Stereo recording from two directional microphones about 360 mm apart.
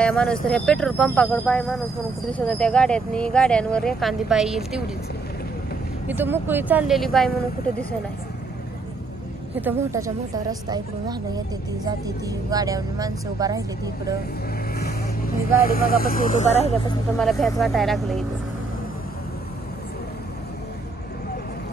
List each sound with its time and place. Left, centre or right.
0.0 s speech: centre
6.0 s speech: centre
9.6 s a woman's voice: centre
14.8 s speech: left
17.2 s speech: centre